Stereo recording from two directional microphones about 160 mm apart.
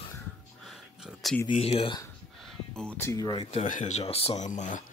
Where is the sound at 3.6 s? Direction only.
50° left (ahead or behind).